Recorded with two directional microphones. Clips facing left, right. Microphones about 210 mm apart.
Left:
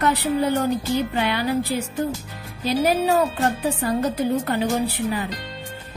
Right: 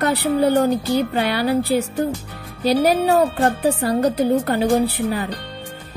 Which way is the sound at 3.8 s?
35° right (ahead or behind).